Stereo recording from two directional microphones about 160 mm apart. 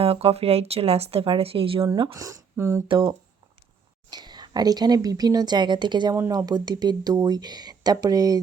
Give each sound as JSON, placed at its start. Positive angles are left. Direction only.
{"t": 0.0, "sound": "speech", "side_deg": -40}
{"t": 1.9, "sound": "speech", "side_deg": -25}
{"t": 2.8, "sound": "speech", "side_deg": -30}